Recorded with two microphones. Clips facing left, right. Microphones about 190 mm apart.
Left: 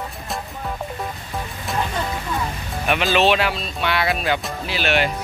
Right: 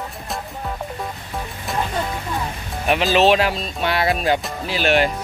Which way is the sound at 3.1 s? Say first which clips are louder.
Right 3 dB; 40° right (ahead or behind).